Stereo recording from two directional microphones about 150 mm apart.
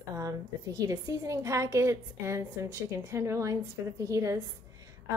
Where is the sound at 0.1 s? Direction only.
25° right (ahead or behind).